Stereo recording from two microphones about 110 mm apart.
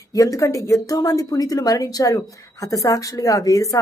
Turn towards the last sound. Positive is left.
turn(degrees=30)  # may be behind; listen again after turning